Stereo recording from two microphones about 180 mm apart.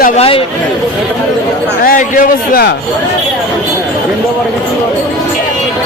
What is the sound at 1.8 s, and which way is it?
Speech, 50° left (ahead or behind).